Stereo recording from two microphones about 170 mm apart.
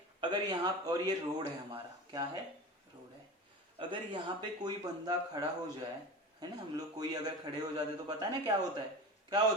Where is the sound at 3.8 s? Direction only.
30° right (ahead or behind).